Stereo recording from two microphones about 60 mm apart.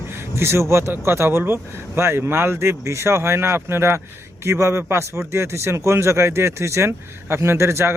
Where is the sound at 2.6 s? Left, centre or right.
Right.